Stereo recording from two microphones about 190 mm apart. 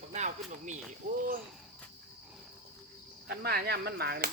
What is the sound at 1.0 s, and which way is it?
Speech, 50° right (ahead or behind).